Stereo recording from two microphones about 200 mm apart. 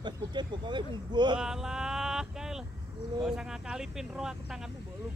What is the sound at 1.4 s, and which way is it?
Male singing, centre (ahead or behind).